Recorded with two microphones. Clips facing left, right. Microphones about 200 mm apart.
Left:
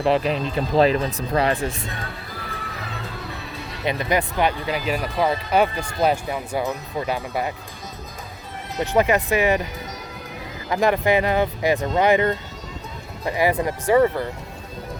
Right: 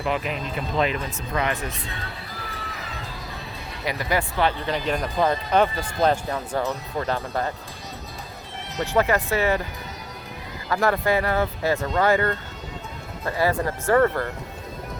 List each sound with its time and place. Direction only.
0.0 s speech: 35° left (ahead or behind)
3.8 s speech: 20° left (ahead or behind)
8.8 s speech: 20° left (ahead or behind)
10.7 s speech: 15° left (ahead or behind)